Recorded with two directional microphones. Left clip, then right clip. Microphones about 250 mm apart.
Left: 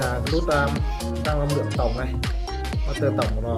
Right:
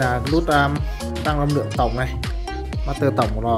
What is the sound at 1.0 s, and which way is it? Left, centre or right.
Speech, centre.